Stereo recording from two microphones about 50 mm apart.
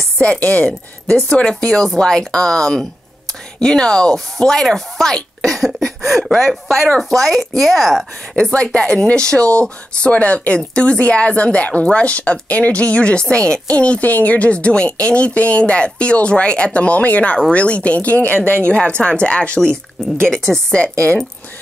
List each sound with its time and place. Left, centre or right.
0.2 s speech: left; by 8.1 s centre
8.4 s speech: centre